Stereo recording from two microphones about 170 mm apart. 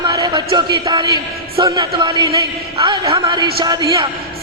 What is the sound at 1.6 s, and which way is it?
Speech, 25° right (ahead or behind).